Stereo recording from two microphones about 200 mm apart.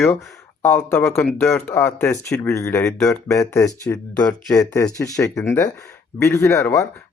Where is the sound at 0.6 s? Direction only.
10° left (ahead or behind).